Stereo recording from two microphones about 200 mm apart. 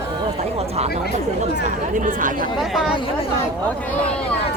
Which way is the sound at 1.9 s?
40° right (ahead or behind).